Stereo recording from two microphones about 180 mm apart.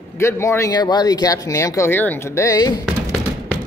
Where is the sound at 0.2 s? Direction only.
15° left (ahead or behind).